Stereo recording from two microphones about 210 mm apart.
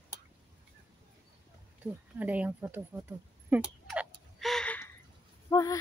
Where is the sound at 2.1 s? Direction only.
5° right (ahead or behind).